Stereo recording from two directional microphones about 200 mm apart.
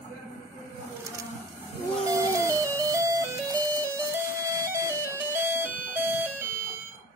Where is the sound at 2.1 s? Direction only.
15° right (ahead or behind).